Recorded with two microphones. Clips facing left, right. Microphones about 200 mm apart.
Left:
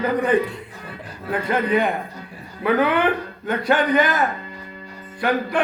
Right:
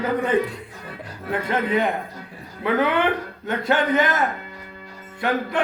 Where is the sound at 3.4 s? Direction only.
25° right (ahead or behind).